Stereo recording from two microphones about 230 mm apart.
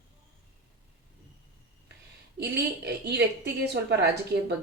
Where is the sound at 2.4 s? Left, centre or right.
Right.